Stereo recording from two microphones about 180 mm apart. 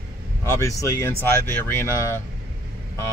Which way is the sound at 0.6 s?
15° left (ahead or behind).